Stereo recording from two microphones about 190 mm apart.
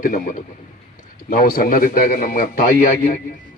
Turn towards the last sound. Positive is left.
turn(degrees=45)  # may be behind; listen again after turning